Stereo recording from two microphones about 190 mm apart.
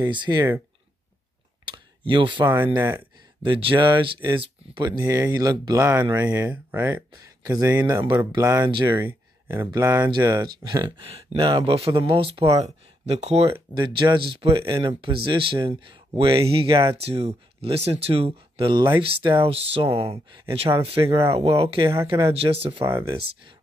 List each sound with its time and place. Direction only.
0.0 s speech: 25° right (ahead or behind)
1.7 s speech: 25° right (ahead or behind)
2.5 s speech: 10° right (ahead or behind)
3.4 s speech: 25° right (ahead or behind)
8.9 s speech: 10° right (ahead or behind)
12.6 s speech: 35° right (ahead or behind)
22.8 s speech: 15° right (ahead or behind)